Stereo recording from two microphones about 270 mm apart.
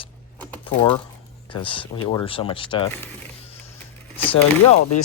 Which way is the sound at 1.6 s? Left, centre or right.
Centre.